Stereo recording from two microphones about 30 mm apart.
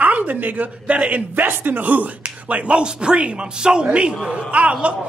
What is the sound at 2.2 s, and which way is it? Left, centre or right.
Speech, right.